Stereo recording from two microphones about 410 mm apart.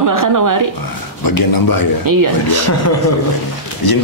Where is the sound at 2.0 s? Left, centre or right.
Right.